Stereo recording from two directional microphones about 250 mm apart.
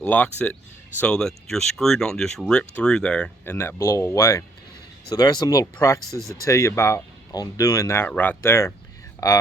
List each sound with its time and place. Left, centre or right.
0.0 s speech: centre
6.0 s speech: centre
6.4 s speech: centre